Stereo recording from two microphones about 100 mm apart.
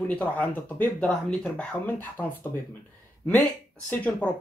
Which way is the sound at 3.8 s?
15° left (ahead or behind).